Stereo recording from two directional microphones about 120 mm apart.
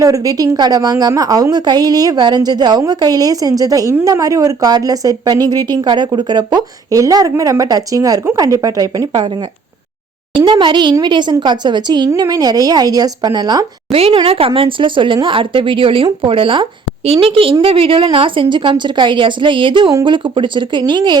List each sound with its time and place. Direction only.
0.0 s a woman's voice: 30° right (ahead or behind)
10.3 s a woman's voice: 40° right (ahead or behind)
13.9 s a woman's voice: 55° right (ahead or behind); by 21.2 s 40° right (ahead or behind)